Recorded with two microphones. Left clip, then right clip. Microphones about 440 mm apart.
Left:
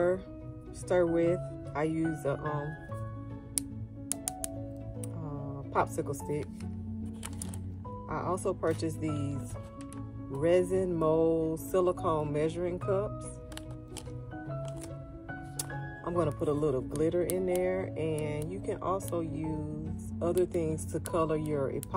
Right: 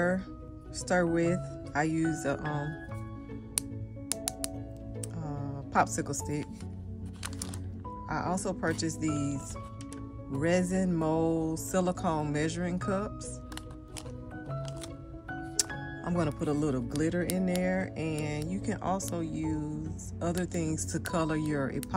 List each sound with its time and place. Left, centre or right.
0.8 s speech: right
5.7 s speech: right
8.1 s speech: right
10.4 s speech: right
15.5 s speech: right